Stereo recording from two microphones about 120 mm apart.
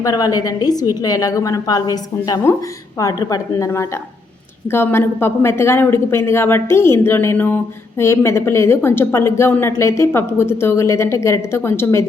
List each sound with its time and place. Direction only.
0.0 s a woman's voice: 30° left (ahead or behind)